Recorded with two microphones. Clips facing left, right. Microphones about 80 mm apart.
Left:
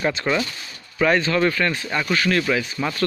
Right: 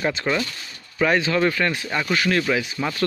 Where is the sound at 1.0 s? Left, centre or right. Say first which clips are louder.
Left 1 dB; centre.